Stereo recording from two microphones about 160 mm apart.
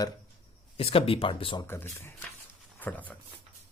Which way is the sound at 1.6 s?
15° left (ahead or behind).